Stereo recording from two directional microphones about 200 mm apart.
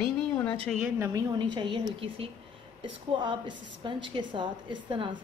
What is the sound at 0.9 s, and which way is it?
Speech, 10° right (ahead or behind).